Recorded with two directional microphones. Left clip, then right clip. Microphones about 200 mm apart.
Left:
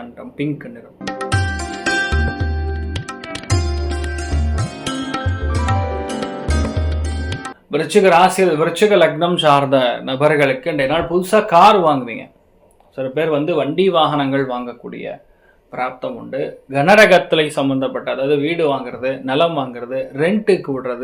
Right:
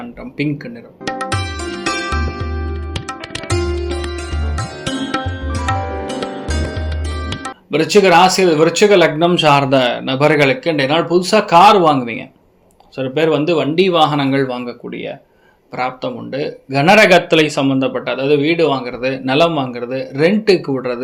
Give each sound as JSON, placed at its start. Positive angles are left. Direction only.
{"t": 1.0, "sound": "music", "side_deg": 0}
{"t": 7.7, "sound": "speech", "side_deg": -40}
{"t": 13.0, "sound": "speech", "side_deg": -45}
{"t": 15.7, "sound": "speech", "side_deg": -45}